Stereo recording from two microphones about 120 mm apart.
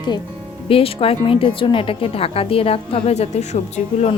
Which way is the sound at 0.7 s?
50° left (ahead or behind).